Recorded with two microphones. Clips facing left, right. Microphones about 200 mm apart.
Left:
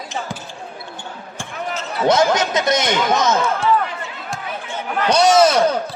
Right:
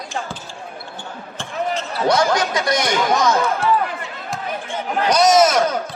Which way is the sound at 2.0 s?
20° left (ahead or behind).